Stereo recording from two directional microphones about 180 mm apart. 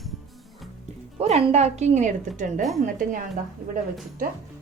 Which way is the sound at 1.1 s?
35° right (ahead or behind).